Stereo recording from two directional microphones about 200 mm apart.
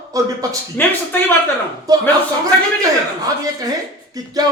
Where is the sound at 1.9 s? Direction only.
20° right (ahead or behind).